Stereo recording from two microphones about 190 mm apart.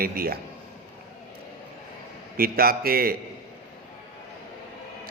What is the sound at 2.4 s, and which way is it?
Speech, 50° right (ahead or behind).